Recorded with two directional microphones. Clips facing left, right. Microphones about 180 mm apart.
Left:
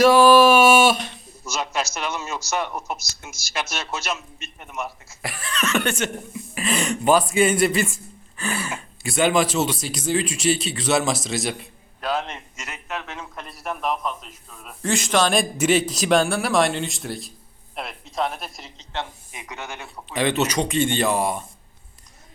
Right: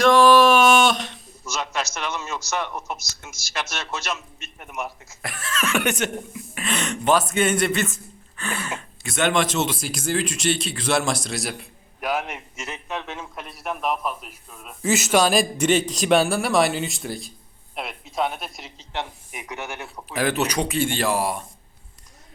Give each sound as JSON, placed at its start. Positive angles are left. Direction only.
{"t": 0.0, "sound": "a sound", "side_deg": 5}
{"t": 3.5, "sound": "speech", "side_deg": 0}
{"t": 5.2, "sound": "speech", "side_deg": 0}
{"t": 6.5, "sound": "speech", "side_deg": 0}
{"t": 11.9, "sound": "a man's voice", "side_deg": -10}
{"t": 12.5, "sound": "a man's voice", "side_deg": -20}
{"t": 13.1, "sound": "speech", "side_deg": -5}
{"t": 18.9, "sound": "speech", "side_deg": -15}